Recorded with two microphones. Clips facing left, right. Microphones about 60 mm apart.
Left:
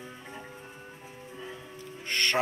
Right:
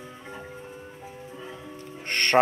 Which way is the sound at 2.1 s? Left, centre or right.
Right.